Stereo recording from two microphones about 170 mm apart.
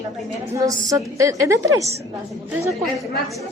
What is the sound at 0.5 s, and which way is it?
A woman's voice, 20° right (ahead or behind).